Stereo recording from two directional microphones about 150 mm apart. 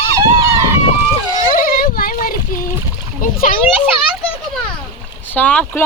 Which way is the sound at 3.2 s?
65° left (ahead or behind).